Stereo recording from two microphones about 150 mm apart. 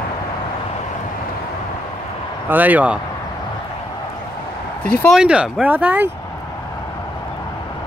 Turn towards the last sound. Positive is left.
turn(degrees=-10)  # may be behind; listen again after turning